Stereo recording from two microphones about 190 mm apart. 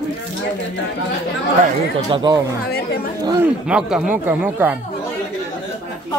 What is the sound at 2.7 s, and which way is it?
Speech, 55° left (ahead or behind).